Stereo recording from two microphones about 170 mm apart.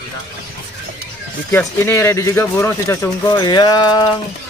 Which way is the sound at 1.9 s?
15° left (ahead or behind).